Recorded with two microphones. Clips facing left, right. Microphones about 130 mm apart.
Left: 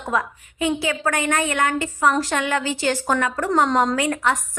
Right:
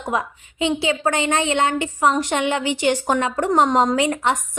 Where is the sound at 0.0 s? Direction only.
20° right (ahead or behind).